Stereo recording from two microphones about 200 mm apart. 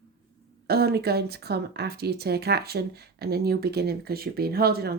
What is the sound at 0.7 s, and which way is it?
Speech, 50° right (ahead or behind).